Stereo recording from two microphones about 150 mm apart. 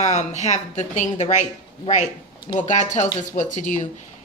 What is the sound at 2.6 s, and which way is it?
A woman's voice, 55° left (ahead or behind).